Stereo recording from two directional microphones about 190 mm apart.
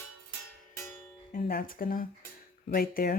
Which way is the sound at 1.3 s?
50° left (ahead or behind).